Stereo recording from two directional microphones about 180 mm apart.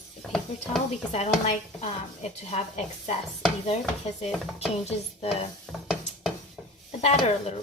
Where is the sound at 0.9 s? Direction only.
40° left (ahead or behind).